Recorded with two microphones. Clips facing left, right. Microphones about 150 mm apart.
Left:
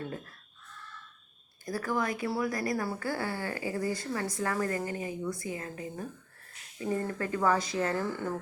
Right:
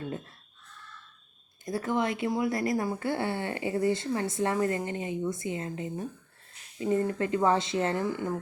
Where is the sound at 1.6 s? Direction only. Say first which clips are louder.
Right 3 dB; 25° right (ahead or behind).